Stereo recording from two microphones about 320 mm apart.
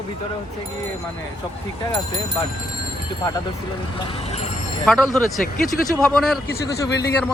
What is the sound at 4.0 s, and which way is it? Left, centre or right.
Speech, centre.